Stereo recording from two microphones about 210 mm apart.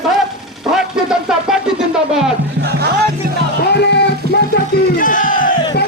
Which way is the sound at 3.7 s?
55° left (ahead or behind).